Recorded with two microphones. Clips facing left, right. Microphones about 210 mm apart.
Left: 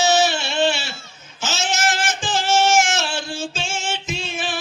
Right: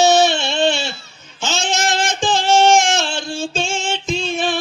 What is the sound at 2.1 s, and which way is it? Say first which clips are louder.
Singing: right 5 dB; 5° left (ahead or behind).